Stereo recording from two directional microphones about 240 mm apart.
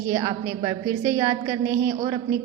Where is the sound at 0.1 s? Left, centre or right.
Centre.